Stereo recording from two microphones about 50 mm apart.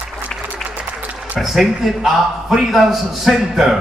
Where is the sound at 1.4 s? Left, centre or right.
Centre.